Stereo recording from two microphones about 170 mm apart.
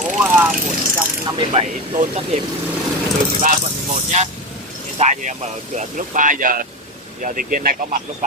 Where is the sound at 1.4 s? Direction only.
35° right (ahead or behind).